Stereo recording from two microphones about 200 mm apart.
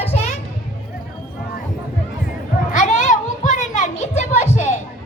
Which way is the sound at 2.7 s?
35° left (ahead or behind).